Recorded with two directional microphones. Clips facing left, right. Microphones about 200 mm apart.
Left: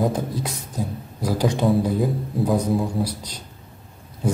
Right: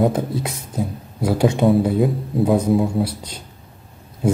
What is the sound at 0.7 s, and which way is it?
Speech, 25° right (ahead or behind).